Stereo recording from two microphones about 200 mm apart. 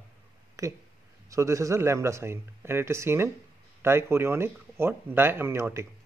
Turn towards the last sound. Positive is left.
turn(degrees=-15)  # may be behind; listen again after turning